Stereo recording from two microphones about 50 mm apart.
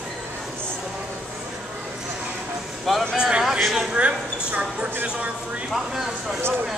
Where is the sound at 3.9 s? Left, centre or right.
Right.